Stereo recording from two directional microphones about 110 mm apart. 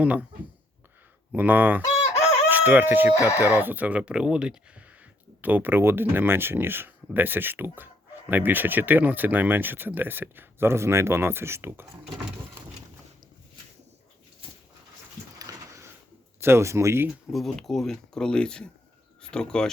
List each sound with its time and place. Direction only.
0.0 s speech: 15° right (ahead or behind)
1.3 s speech: 15° right (ahead or behind)
15.4 s a sound: 30° right (ahead or behind)
16.4 s speech: 25° right (ahead or behind)
17.3 s speech: centre (ahead or behind)